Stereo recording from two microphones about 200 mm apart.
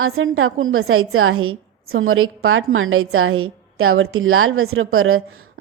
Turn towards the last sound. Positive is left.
turn(degrees=-90)